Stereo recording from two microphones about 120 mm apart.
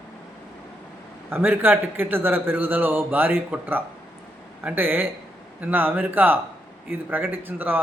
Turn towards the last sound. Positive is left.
turn(degrees=-15)  # may be behind; listen again after turning